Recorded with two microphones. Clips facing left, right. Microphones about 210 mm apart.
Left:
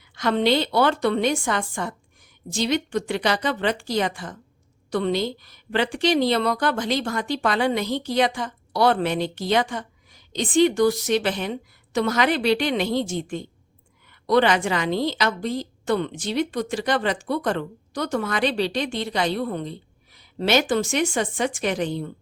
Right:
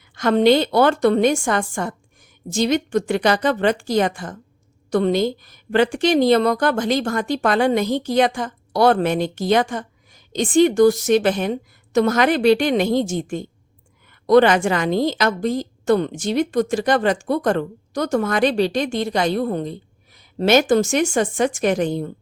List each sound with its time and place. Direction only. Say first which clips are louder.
0.2 s a woman's voice: right 6 dB; 45° right (ahead or behind)